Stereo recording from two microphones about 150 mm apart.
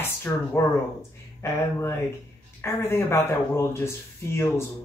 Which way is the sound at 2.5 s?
15° left (ahead or behind).